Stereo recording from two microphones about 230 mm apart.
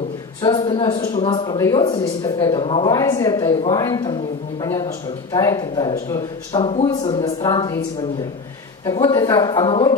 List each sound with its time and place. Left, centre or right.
0.4 s a man's voice: centre
8.8 s a man's voice: centre